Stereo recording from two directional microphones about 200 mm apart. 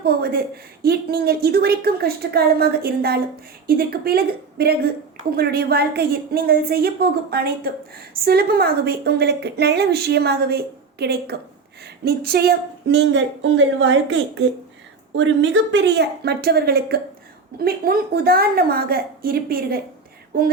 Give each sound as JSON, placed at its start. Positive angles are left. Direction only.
{"t": 0.0, "sound": "a woman's voice", "side_deg": -50}